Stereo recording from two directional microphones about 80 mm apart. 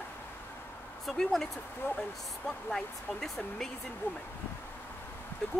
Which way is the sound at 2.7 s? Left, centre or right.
Centre.